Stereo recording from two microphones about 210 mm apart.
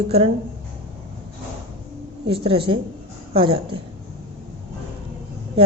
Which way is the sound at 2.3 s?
25° right (ahead or behind).